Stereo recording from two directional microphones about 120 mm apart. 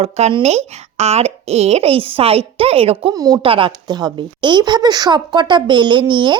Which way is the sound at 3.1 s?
30° right (ahead or behind).